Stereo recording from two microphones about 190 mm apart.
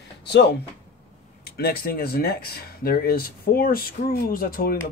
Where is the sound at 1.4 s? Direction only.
55° left (ahead or behind).